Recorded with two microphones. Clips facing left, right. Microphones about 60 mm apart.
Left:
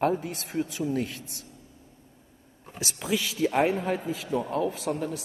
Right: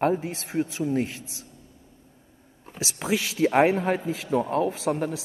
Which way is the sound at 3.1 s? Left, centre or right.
Right.